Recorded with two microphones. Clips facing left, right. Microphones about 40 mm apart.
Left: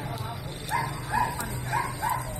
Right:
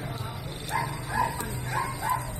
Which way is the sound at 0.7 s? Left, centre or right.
Centre.